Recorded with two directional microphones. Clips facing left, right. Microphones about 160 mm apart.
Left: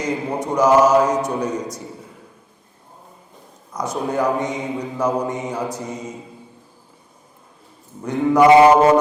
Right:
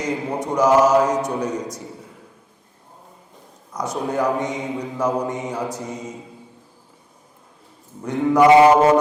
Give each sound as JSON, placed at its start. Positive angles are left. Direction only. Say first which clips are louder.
{"t": 0.0, "sound": "speech", "louder": "left 1 dB", "side_deg": 15}
{"t": 3.7, "sound": "a man's voice", "louder": "left 1 dB", "side_deg": 25}
{"t": 8.0, "sound": "a man's voice", "louder": "left 1 dB", "side_deg": 15}
{"t": 8.4, "sound": "mantra", "louder": "left 1 dB", "side_deg": 30}